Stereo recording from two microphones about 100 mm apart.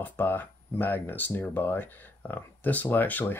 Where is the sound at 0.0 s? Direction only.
20° left (ahead or behind).